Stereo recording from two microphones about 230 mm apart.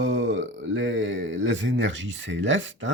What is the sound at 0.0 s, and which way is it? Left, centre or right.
Speech, right.